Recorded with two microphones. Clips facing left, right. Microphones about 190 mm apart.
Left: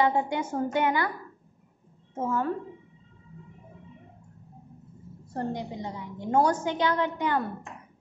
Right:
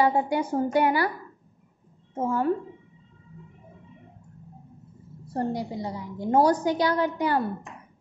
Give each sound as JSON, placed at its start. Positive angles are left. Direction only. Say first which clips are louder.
{"t": 0.0, "sound": "a woman's voice", "louder": "right 2 dB", "side_deg": -35}
{"t": 2.2, "sound": "a woman's voice", "louder": "right 3 dB", "side_deg": -30}
{"t": 5.3, "sound": "a woman's voice", "louder": "right 4 dB", "side_deg": -35}